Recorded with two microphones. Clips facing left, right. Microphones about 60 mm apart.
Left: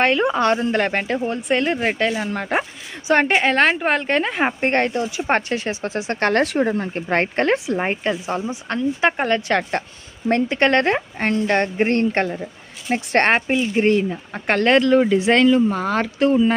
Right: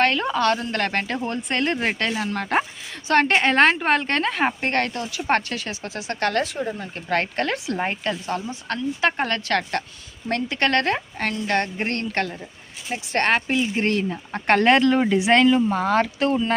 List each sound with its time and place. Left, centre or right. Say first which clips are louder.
0.0 s speech: left 3 dB; centre; by 6.4 s left
6.4 s speech: left 8 dB; left
6.9 s speech: left 4 dB; left
12.9 s speech: left 5 dB; left
13.5 s speech: left 5 dB; centre